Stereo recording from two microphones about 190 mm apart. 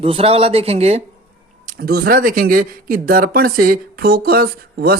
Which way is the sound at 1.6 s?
50° right (ahead or behind).